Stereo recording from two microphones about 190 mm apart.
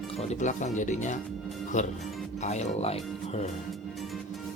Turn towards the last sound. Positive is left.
turn(degrees=35)  # may be behind; listen again after turning